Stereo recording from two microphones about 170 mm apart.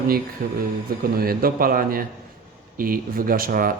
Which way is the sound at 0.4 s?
55° right (ahead or behind).